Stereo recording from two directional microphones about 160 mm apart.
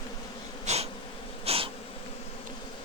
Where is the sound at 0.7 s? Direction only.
45° right (ahead or behind).